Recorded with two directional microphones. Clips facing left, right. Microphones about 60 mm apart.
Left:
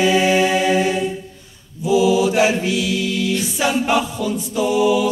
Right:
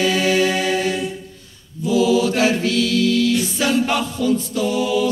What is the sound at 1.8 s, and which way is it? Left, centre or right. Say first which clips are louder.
Music: left 1 dB; centre.